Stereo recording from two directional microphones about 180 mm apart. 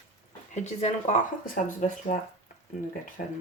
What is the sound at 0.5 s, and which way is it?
Speech, 40° left (ahead or behind).